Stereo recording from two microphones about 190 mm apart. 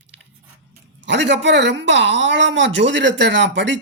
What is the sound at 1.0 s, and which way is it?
Speech, 70° right (ahead or behind).